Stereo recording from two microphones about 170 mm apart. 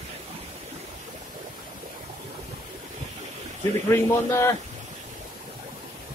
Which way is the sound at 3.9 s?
15° left (ahead or behind).